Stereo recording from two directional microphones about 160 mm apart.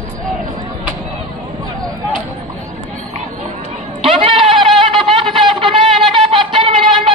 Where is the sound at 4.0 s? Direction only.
35° right (ahead or behind).